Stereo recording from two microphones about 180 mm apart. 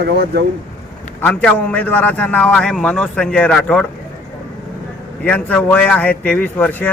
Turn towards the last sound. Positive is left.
turn(degrees=10)  # may be behind; listen again after turning